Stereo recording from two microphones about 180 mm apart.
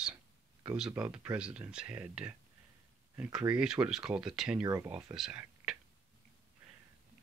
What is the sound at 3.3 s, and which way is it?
Speech, 5° right (ahead or behind).